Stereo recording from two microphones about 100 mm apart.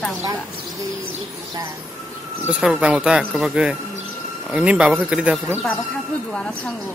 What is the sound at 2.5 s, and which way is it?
Speech, 10° right (ahead or behind).